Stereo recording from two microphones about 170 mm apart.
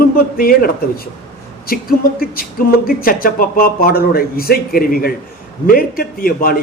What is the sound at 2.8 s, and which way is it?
Speech, 55° left (ahead or behind).